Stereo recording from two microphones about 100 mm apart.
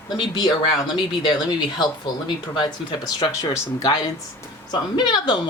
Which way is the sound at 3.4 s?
30° left (ahead or behind).